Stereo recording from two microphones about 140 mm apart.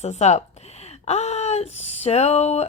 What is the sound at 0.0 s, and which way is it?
A woman's voice, 55° left (ahead or behind).